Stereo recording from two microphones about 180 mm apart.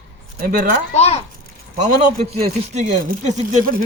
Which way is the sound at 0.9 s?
35° left (ahead or behind).